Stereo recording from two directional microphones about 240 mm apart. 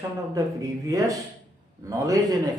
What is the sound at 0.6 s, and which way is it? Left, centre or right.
A man's voice, centre.